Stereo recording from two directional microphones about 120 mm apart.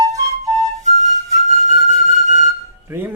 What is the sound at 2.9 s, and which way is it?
Speech, 15° right (ahead or behind).